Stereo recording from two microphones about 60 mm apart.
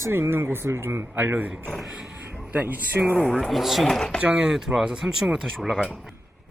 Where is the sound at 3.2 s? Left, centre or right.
Centre.